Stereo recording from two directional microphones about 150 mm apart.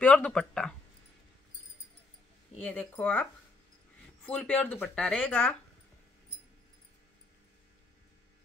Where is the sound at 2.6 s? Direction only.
10° left (ahead or behind).